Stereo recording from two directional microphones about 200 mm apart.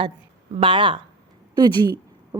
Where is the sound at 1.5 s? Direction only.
20° right (ahead or behind).